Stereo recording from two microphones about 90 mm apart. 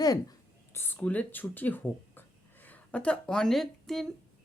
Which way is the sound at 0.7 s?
25° left (ahead or behind).